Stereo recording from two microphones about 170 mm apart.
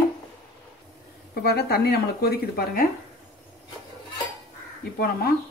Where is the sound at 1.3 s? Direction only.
70° left (ahead or behind).